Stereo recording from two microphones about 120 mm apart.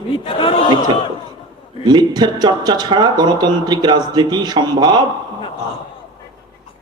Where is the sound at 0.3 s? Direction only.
45° left (ahead or behind).